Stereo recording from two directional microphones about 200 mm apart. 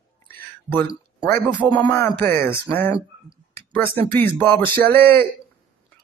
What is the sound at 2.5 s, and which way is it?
Speech, 10° left (ahead or behind).